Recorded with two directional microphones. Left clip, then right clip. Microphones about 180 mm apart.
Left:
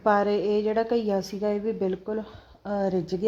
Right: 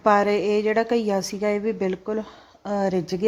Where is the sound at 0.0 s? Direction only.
20° right (ahead or behind).